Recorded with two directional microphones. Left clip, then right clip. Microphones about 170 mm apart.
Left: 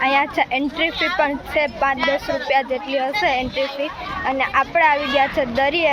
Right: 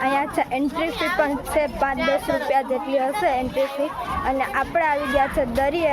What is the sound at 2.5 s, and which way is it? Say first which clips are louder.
Speech: left 3 dB; centre (ahead or behind).